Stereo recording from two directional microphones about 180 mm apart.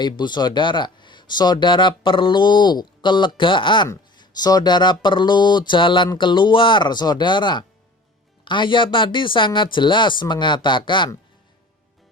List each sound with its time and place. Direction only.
0.0 s speech: 25° left (ahead or behind)